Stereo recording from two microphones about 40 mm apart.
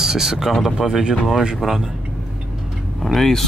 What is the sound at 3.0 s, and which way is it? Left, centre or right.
Speech, centre.